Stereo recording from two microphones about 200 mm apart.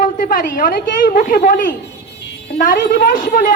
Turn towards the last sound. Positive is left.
turn(degrees=45)  # may be behind; listen again after turning